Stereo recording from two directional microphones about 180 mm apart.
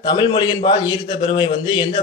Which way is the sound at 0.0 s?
25° left (ahead or behind).